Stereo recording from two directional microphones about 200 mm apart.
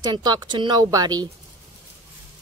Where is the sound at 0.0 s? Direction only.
20° right (ahead or behind).